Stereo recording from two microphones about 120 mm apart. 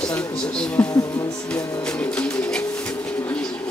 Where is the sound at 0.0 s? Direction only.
10° left (ahead or behind).